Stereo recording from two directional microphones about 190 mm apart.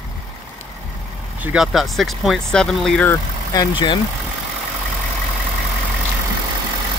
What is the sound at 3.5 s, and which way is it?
Speech, 25° left (ahead or behind).